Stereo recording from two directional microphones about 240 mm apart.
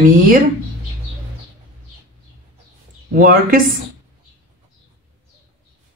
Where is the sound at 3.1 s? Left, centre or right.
Right.